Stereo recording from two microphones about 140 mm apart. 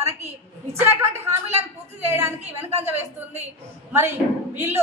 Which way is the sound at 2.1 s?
15° right (ahead or behind).